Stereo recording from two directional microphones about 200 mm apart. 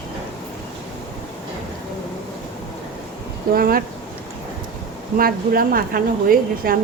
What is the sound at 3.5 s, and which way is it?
Speech, 45° right (ahead or behind).